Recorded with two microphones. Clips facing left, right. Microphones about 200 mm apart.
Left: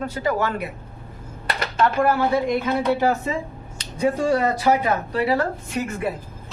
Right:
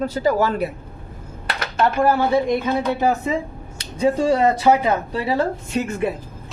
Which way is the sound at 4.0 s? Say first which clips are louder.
Right 3 dB; 25° right (ahead or behind).